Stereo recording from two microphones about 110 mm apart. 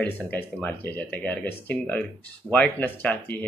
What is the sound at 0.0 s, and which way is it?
Speech, 15° left (ahead or behind).